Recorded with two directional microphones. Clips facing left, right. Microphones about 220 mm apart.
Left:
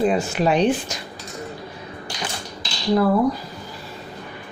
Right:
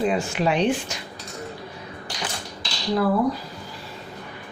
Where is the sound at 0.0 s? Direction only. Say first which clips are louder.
Left 3 dB; 40° left (ahead or behind).